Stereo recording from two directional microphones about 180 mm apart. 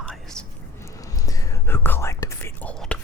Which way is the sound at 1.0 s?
20° left (ahead or behind).